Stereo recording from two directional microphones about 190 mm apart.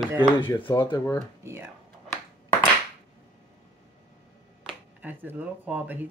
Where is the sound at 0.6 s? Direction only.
25° left (ahead or behind).